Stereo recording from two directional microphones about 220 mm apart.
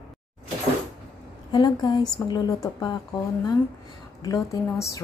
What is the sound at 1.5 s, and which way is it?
A woman's voice, 20° left (ahead or behind).